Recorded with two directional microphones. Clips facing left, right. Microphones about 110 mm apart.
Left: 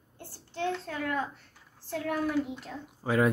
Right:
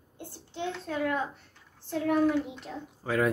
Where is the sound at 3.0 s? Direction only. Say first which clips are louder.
Left 2 dB; 5° left (ahead or behind).